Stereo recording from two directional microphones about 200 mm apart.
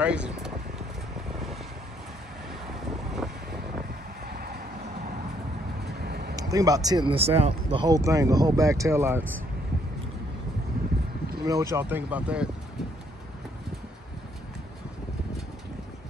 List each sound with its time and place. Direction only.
0.0 s speech: 5° right (ahead or behind)
3.2 s vehicle: centre (ahead or behind)
5.9 s vehicle: 55° right (ahead or behind)
6.3 s speech: 15° right (ahead or behind)
11.4 s speech: 15° right (ahead or behind)